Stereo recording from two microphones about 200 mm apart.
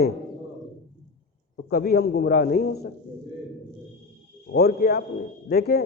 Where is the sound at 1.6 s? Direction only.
45° left (ahead or behind).